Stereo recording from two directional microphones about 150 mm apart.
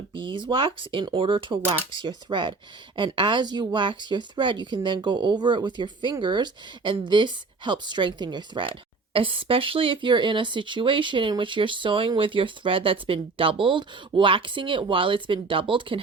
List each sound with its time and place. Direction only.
0.1 s speech: 35° right (ahead or behind)